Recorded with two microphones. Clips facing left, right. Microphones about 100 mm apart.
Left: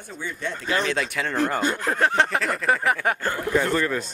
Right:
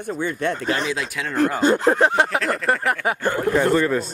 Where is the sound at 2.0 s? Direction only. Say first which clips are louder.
Right 3 dB; 10° right (ahead or behind).